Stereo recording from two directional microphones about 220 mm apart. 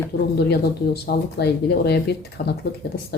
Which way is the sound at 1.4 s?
50° left (ahead or behind).